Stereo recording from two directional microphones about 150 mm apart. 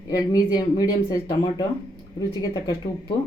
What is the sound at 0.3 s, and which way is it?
Speech, 25° left (ahead or behind).